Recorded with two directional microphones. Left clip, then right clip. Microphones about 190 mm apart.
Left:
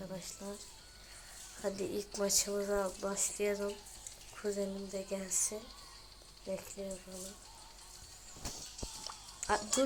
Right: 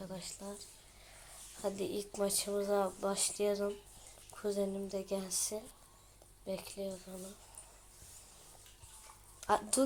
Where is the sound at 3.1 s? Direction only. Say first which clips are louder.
Right 1 dB; 20° right (ahead or behind).